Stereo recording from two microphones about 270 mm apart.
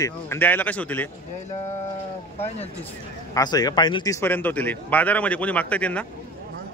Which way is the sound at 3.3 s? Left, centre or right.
Centre.